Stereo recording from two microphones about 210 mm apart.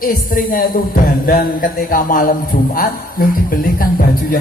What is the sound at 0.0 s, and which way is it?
Speech, 40° left (ahead or behind).